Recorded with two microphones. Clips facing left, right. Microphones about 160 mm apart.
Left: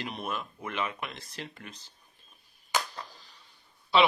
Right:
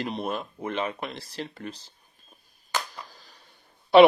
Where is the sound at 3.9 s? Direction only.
55° right (ahead or behind).